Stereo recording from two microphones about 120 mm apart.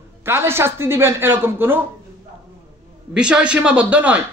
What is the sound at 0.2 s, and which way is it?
Speech, 20° right (ahead or behind).